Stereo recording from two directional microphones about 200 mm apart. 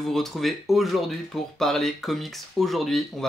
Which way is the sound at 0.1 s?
Centre (ahead or behind).